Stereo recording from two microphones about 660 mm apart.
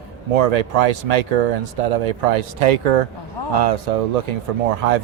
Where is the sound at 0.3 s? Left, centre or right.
Right.